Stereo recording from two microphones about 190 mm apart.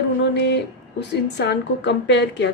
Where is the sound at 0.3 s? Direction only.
65° left (ahead or behind).